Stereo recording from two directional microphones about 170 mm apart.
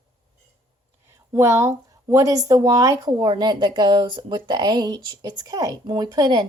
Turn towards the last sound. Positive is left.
turn(degrees=-20)  # may be behind; listen again after turning